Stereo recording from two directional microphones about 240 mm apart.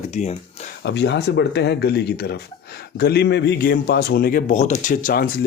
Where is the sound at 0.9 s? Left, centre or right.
Left.